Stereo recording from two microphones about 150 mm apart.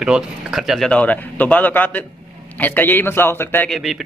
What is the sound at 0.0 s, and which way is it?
A man's voice, 5° right (ahead or behind).